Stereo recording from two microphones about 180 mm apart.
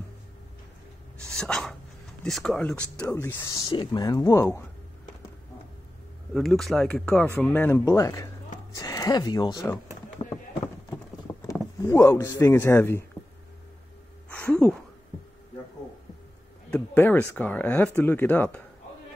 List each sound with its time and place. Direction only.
1.2 s dog: 5° left (ahead or behind)
2.2 s speech: 5° left (ahead or behind)
3.6 s speech: 25° left (ahead or behind)
6.3 s speech: centre (ahead or behind); by 9.8 s 20° left (ahead or behind)
10.2 s clip-clop: 35° left (ahead or behind)
11.4 s speech: 15° left (ahead or behind)
14.3 s a sound: 10° left (ahead or behind)
16.7 s speech: 10° left (ahead or behind)